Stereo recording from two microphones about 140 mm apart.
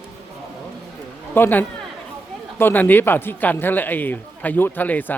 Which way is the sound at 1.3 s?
15° left (ahead or behind).